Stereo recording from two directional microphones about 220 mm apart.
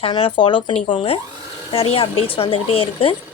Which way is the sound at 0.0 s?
25° left (ahead or behind).